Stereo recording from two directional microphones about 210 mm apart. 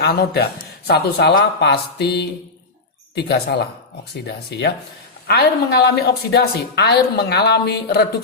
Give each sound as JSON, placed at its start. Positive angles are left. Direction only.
{"t": 0.0, "sound": "a woman's voice", "side_deg": 50}
{"t": 5.3, "sound": "a woman's voice", "side_deg": 50}